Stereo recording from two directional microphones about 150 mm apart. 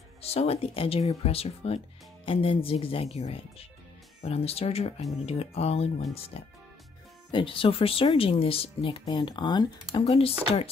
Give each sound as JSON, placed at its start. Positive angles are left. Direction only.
{"t": 0.2, "sound": "speech", "side_deg": 40}